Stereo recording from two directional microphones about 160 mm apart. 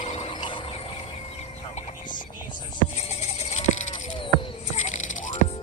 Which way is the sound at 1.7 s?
55° left (ahead or behind).